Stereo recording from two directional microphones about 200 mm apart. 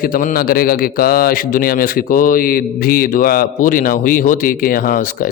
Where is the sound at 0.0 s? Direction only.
45° left (ahead or behind).